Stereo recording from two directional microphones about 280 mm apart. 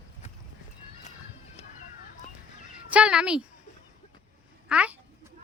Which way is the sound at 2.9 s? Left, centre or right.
Centre.